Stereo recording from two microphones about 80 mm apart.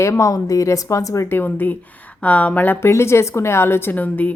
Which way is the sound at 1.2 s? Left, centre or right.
Left.